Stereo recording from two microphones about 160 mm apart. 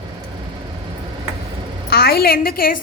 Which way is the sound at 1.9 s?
75° left (ahead or behind).